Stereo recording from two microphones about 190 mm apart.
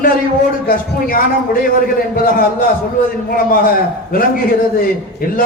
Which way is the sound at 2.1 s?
50° left (ahead or behind).